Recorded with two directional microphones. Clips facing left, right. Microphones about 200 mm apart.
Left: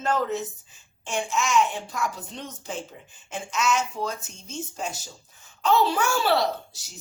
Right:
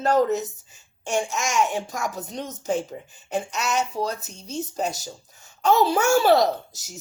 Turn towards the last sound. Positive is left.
turn(degrees=-45)  # may be behind; listen again after turning